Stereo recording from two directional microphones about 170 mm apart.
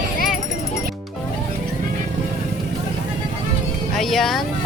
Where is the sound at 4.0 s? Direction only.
Centre (ahead or behind).